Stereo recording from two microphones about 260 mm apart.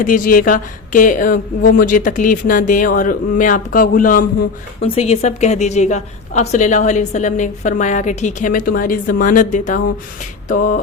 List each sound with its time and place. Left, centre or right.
0.0 s a woman's voice: left